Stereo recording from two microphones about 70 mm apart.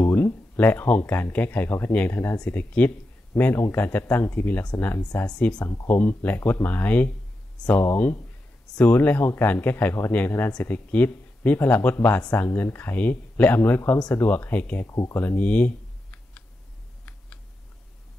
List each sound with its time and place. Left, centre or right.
0.1 s speech: left
5.2 s speech: centre
5.9 s speech: left
8.7 s speech: left
14.9 s speech: left
15.1 s computer keyboard: left